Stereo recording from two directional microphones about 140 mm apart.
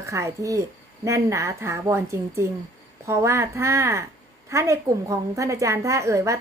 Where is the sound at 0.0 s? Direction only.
20° right (ahead or behind).